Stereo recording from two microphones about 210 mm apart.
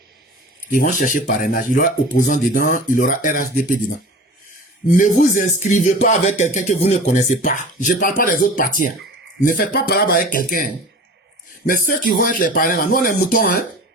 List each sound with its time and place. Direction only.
0.7 s speech: 40° left (ahead or behind)
4.9 s speech: 35° left (ahead or behind)